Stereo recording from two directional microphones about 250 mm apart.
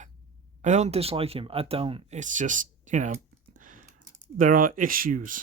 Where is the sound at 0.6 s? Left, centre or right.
Right.